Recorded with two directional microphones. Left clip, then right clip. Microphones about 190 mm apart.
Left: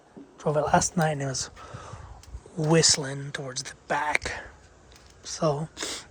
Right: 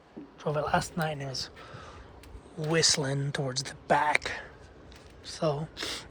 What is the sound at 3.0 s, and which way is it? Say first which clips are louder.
Speech: right 2 dB; 15° left (ahead or behind).